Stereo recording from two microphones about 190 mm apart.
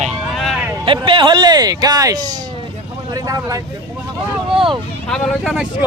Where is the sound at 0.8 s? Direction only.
25° right (ahead or behind).